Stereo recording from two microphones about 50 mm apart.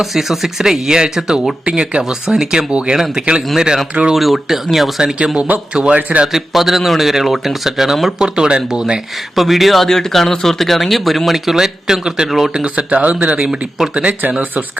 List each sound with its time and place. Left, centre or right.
0.0 s speech: centre
1.6 s speech: right
4.1 s speech: centre
5.0 s speech: centre
6.2 s speech: centre
8.2 s speech: centre
9.3 s speech: centre
12.5 s speech: right
13.4 s speech: centre
13.9 s speech: right